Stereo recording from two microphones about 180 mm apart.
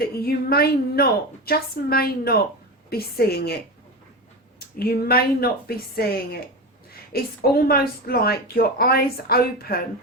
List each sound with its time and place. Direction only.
0.0 s speech: 60° left (ahead or behind)
4.8 s speech: 60° left (ahead or behind)